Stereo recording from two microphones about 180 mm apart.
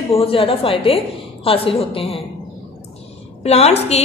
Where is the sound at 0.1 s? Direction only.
30° left (ahead or behind).